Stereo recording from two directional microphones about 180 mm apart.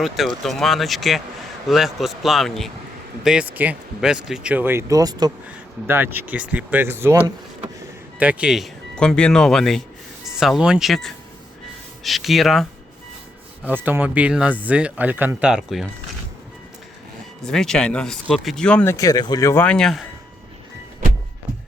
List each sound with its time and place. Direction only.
0.0 s speech: centre (ahead or behind); by 5.3 s 20° right (ahead or behind)
5.9 s speech: 10° right (ahead or behind)
13.7 s speech: 10° right (ahead or behind)
17.4 s speech: 5° left (ahead or behind)
18.9 s speech: 20° left (ahead or behind); by 20.1 s centre (ahead or behind)